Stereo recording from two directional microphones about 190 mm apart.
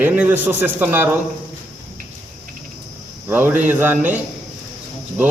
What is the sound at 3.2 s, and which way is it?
Speech, 10° right (ahead or behind).